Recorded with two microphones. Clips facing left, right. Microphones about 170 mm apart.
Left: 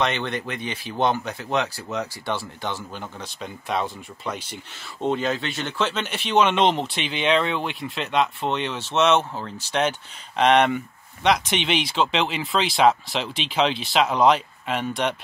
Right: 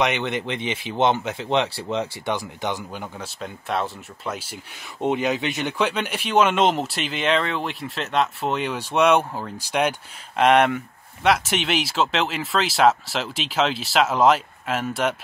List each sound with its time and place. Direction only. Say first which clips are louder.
0.0 s speech: right 2 dB; 20° right (ahead or behind)